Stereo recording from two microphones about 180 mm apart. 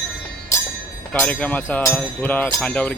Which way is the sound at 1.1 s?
10° left (ahead or behind).